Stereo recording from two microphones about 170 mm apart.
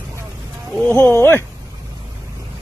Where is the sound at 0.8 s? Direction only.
10° left (ahead or behind).